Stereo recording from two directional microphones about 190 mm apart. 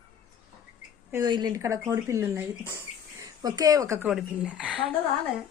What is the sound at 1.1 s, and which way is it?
Speech, 20° right (ahead or behind).